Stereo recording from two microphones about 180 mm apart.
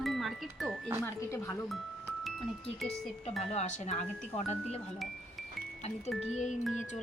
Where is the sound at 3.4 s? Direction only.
40° left (ahead or behind).